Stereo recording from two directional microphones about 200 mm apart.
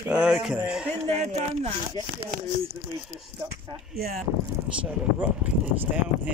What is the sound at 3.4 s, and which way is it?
Speech, 15° right (ahead or behind).